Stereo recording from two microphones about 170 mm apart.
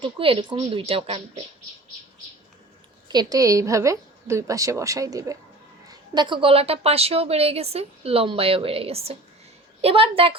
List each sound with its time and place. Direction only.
0.0 s a woman's voice: 30° right (ahead or behind)
3.1 s a woman's voice: 25° right (ahead or behind)